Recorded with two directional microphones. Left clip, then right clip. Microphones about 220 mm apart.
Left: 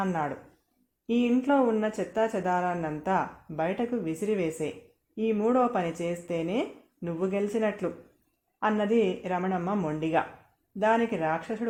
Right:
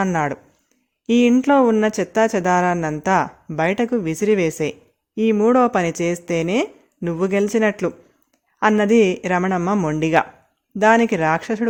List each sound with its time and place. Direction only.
0.0 s speech: 45° right (ahead or behind)